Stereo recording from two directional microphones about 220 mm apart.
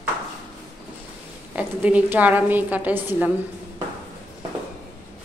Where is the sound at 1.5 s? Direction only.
5° right (ahead or behind).